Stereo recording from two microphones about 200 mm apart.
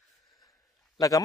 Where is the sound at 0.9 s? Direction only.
15° left (ahead or behind).